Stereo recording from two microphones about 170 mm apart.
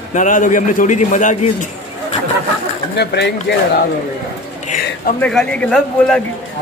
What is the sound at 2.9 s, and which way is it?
Speech, 80° left.